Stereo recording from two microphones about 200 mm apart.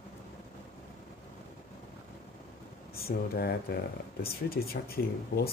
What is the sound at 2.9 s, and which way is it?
Speech, 50° left (ahead or behind).